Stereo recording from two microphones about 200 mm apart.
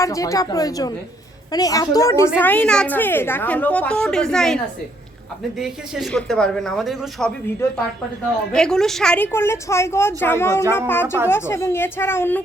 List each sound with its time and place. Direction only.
0.0 s a woman's voice: 15° left (ahead or behind); by 7.3 s centre (ahead or behind)
7.6 s a woman's voice: 15° left (ahead or behind)
8.5 s a woman's voice: 5° left (ahead or behind)